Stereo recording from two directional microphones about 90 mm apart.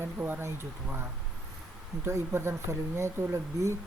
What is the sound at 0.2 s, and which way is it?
Speech, 25° right (ahead or behind).